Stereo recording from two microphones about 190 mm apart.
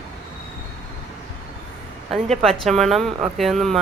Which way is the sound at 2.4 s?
Centre (ahead or behind).